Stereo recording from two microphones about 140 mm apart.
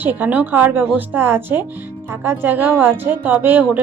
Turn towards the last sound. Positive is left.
turn(degrees=-15)  # may be behind; listen again after turning